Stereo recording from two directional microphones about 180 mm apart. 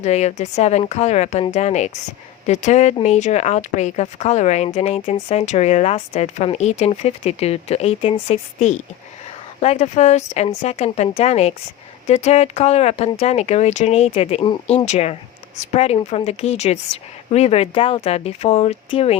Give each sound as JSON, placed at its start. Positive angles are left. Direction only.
{"t": 0.0, "sound": "speech", "side_deg": 40}
{"t": 14.8, "sound": "speech", "side_deg": 35}